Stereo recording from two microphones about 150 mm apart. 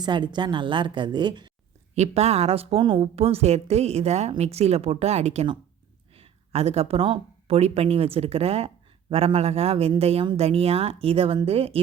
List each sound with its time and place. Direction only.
0.0 s speech: 30° right (ahead or behind)
2.0 s a woman's voice: 45° right (ahead or behind)